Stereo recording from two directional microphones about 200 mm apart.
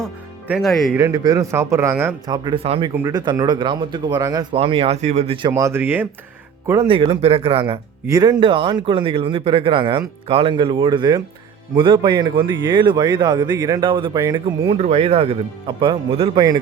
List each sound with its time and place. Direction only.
0.0 s speech: 5° right (ahead or behind)
0.9 s a man's voice: 15° right (ahead or behind)
2.3 s a man's voice: 20° right (ahead or behind)
5.5 s a man's voice: 15° right (ahead or behind)
6.7 s a man's voice: 25° right (ahead or behind)
14.7 s a man's voice: 30° right (ahead or behind)